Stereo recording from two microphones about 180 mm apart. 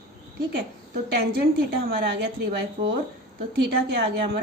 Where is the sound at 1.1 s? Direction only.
60° right (ahead or behind).